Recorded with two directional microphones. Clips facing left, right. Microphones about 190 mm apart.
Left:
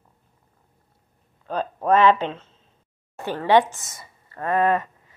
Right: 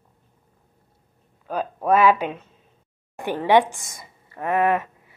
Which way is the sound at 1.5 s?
10° right (ahead or behind).